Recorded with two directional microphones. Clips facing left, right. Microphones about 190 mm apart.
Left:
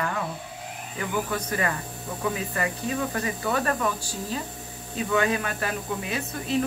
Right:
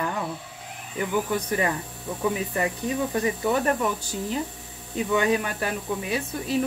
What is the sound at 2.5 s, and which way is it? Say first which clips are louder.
Speech: right 2 dB; 20° right (ahead or behind).